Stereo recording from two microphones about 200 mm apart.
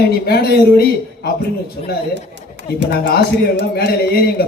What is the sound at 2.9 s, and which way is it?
A man's voice, 50° left (ahead or behind).